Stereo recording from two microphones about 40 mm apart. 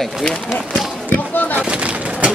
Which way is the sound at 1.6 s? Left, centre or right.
Right.